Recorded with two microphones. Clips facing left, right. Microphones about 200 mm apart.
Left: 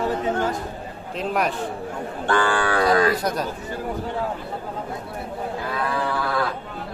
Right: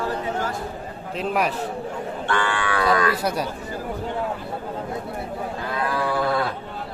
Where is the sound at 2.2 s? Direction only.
35° left (ahead or behind).